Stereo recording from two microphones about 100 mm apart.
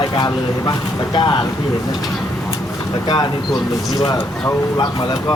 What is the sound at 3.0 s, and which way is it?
Speech, 45° left (ahead or behind).